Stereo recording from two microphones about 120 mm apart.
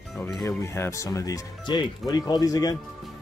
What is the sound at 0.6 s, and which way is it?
Speech, 25° left (ahead or behind).